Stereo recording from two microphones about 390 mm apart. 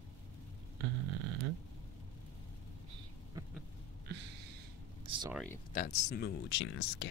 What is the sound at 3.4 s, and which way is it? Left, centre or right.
Vehicle, centre.